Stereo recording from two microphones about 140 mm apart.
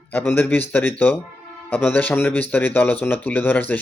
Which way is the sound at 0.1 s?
15° left (ahead or behind).